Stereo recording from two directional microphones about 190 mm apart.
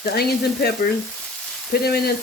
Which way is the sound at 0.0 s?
55° left (ahead or behind).